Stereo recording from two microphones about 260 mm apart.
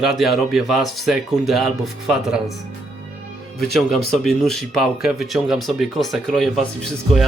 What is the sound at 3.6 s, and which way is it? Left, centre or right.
Speech, centre.